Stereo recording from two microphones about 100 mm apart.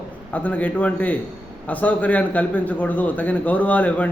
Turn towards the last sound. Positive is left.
turn(degrees=15)  # may be behind; listen again after turning